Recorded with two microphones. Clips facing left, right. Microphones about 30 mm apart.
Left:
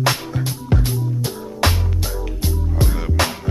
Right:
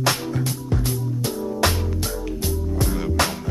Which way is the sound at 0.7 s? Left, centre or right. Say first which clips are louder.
Left 5 dB; left.